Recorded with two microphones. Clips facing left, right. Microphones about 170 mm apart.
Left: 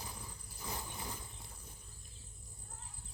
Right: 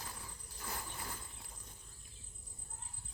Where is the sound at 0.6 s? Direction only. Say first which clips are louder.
Left 1 dB; 15° left (ahead or behind).